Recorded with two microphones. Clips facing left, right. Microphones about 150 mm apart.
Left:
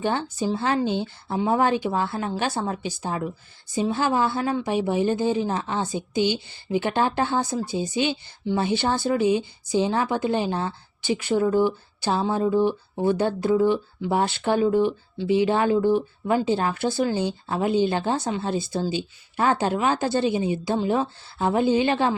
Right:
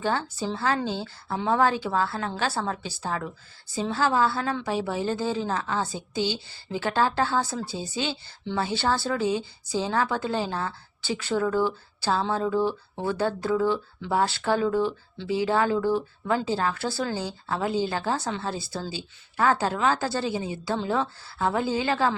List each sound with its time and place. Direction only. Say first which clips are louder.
0.0 s speech: left 3 dB; 20° left (ahead or behind)